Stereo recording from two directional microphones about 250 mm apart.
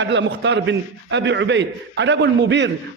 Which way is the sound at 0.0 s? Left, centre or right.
Right.